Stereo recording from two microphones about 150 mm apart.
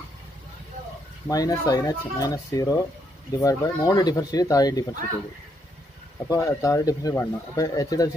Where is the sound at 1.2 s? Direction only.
25° left (ahead or behind).